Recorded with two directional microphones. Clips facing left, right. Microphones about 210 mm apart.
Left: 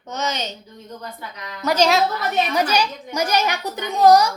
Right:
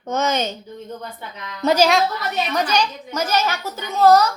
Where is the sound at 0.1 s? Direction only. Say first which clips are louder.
Right 5 dB; 50° right (ahead or behind).